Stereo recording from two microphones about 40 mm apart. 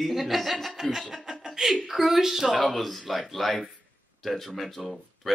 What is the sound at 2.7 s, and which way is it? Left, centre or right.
Speech, centre.